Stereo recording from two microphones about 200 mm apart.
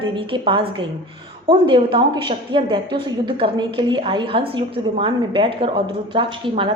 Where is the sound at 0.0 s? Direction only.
25° right (ahead or behind).